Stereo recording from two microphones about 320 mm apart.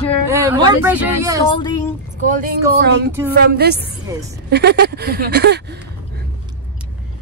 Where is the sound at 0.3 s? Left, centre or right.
Centre.